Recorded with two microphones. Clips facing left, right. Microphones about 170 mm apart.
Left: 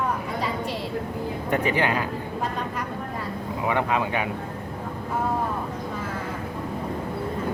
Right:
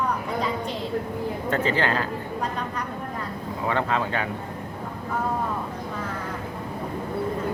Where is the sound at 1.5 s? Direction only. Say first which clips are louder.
Left 1 dB; 15° left (ahead or behind).